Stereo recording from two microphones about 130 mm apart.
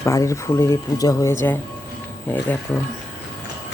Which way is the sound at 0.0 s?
25° left (ahead or behind).